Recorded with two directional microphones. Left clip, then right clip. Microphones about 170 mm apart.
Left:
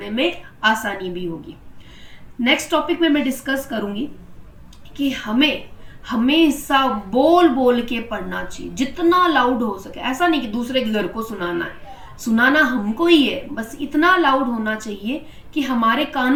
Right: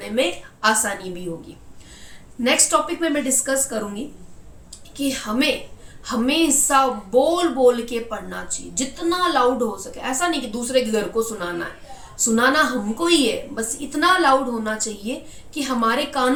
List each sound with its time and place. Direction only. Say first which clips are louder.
0.2 s a woman's voice: left 1 dB; 30° right (ahead or behind)
2.4 s a woman's voice: even; 30° right (ahead or behind)